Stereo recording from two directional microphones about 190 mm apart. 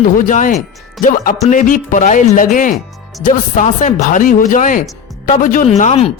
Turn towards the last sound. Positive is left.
turn(degrees=35)  # may be behind; listen again after turning